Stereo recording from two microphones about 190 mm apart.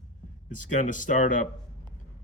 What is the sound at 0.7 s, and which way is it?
Speech, 40° left (ahead or behind).